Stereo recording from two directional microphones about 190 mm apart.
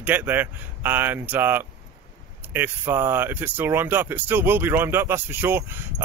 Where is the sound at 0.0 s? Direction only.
10° right (ahead or behind).